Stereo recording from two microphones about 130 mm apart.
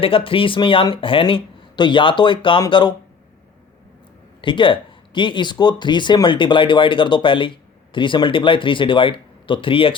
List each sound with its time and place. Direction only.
0.0 s speech: 45° left (ahead or behind)
4.4 s speech: 40° left (ahead or behind)